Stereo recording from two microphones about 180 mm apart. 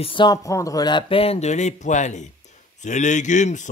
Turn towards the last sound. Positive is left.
turn(degrees=40)  # may be behind; listen again after turning